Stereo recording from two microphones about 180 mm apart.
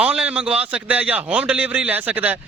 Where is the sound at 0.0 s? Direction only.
5° right (ahead or behind).